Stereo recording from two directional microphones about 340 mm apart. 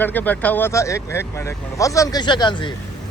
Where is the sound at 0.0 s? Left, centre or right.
Centre.